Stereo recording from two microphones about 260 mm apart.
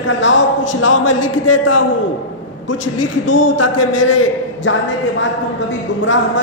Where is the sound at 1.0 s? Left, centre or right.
Left.